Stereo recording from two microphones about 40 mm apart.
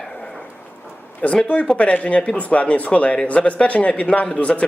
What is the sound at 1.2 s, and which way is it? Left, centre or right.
Speech, left.